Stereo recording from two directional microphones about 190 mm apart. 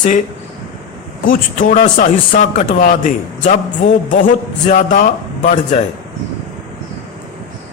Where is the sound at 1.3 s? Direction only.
45° left (ahead or behind).